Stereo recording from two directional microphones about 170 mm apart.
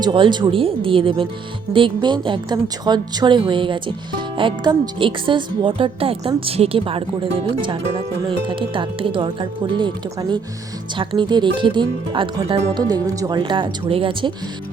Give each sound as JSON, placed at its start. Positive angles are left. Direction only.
{"t": 0.0, "sound": "a woman's voice", "side_deg": -25}
{"t": 12.7, "sound": "a woman's voice", "side_deg": -20}